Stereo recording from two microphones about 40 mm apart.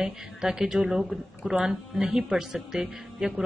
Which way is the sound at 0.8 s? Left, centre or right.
Centre.